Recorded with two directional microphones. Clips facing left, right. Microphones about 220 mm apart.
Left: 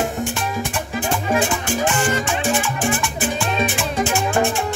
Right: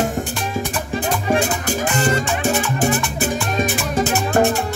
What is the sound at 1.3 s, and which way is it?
Music, 40° right (ahead or behind).